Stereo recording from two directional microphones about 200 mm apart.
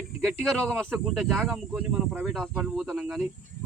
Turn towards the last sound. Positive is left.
turn(degrees=-5)  # may be behind; listen again after turning